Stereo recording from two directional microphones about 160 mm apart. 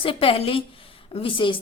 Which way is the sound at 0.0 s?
35° left (ahead or behind).